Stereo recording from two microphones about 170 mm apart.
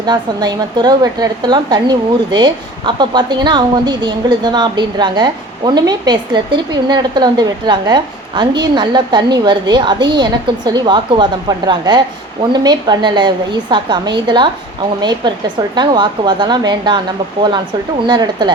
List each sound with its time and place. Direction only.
0.0 s a woman's voice: 25° right (ahead or behind)
15.7 s a woman's voice: 25° right (ahead or behind)
18.0 s a woman's voice: 25° right (ahead or behind)